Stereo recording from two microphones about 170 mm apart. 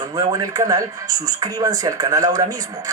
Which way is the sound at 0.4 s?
20° right (ahead or behind).